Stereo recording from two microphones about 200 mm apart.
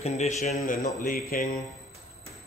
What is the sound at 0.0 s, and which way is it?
Speech, 30° left (ahead or behind).